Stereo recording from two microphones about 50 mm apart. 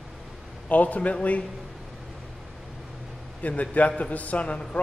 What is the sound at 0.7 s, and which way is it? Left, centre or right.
Speech, left.